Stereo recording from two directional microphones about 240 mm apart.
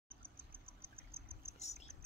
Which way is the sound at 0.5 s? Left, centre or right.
Right.